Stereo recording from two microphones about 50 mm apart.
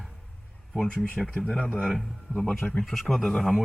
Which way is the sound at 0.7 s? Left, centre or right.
Centre.